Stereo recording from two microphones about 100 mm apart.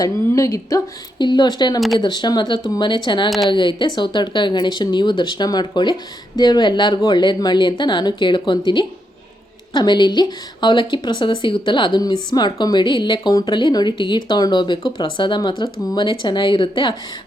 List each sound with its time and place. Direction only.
0.0 s speech: 35° left (ahead or behind)
1.2 s speech: 45° left (ahead or behind)
3.2 s speech: centre (ahead or behind)
3.5 s speech: 55° left (ahead or behind)
16.0 s speech: 50° left (ahead or behind)